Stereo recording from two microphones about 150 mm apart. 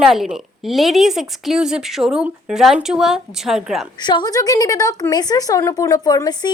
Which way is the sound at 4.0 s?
30° left (ahead or behind).